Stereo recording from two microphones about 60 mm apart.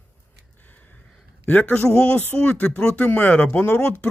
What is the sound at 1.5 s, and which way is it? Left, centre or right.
Speech, left.